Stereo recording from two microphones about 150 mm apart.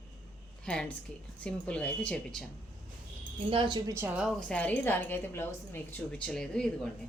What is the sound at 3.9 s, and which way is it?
Speech, 10° right (ahead or behind).